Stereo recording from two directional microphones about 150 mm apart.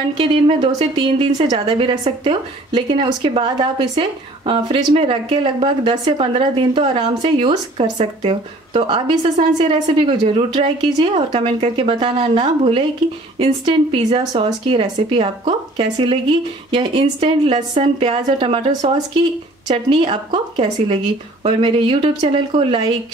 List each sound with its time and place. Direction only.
0.2 s a woman's voice: 35° right (ahead or behind)